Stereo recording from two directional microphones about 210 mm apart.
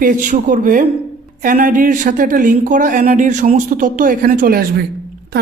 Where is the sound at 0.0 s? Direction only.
40° right (ahead or behind).